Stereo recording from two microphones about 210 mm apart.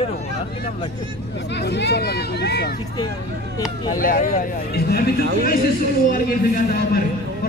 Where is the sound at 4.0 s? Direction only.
40° left (ahead or behind).